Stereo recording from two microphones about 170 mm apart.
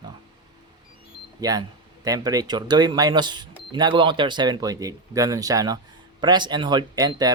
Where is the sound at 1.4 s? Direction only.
20° right (ahead or behind).